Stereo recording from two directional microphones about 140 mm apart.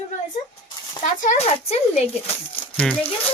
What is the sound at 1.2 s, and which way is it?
Speech, 60° left (ahead or behind).